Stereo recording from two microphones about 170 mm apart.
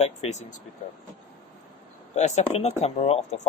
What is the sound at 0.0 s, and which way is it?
Speech, 40° left (ahead or behind).